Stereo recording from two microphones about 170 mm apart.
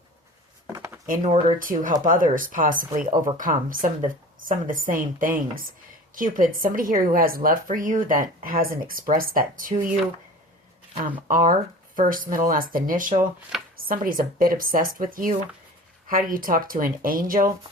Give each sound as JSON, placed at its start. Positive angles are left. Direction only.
{"t": 0.7, "sound": "a sound", "side_deg": -15}
{"t": 1.0, "sound": "speech", "side_deg": -50}
{"t": 1.5, "sound": "a woman's voice", "side_deg": -55}
{"t": 11.3, "sound": "a woman's voice", "side_deg": -55}